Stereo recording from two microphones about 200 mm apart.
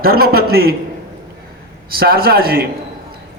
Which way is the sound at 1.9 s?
50° right (ahead or behind).